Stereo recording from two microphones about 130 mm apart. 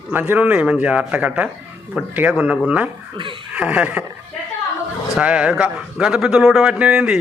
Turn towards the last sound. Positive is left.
turn(degrees=-5)  # may be behind; listen again after turning